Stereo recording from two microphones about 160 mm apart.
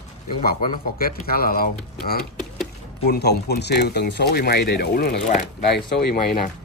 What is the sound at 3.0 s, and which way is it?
Speech, 90° left.